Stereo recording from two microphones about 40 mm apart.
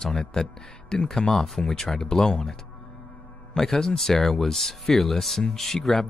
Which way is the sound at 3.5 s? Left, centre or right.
Centre.